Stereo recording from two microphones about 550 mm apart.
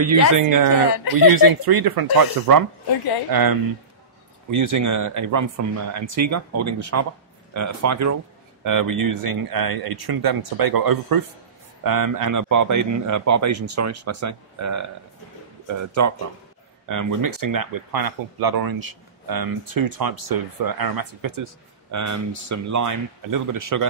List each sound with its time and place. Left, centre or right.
0.0 s speech: right